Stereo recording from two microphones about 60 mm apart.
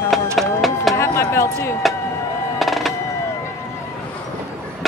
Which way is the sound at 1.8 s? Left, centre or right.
Centre.